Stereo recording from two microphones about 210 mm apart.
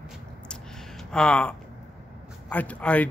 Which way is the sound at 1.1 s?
5° left (ahead or behind).